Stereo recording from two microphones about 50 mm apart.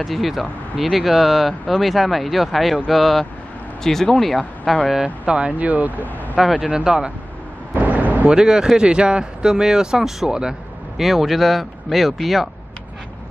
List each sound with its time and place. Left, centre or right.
0.0 s speech: centre
5.0 s speech: right
5.7 s speech: right
6.4 s speech: centre
7.7 s a sound: right
8.3 s speech: centre